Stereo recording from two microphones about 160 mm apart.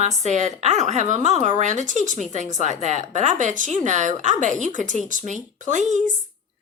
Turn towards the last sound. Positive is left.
turn(degrees=-50)  # may be behind; listen again after turning